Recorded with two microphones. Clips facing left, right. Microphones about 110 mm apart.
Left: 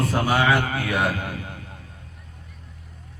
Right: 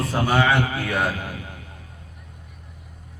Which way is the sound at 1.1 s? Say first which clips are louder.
Left 2 dB; 45° left (ahead or behind).